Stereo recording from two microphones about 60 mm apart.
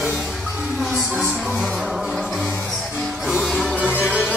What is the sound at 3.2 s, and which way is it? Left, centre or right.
Music, centre.